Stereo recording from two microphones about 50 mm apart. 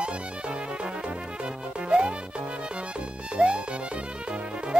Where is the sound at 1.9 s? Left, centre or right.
Right.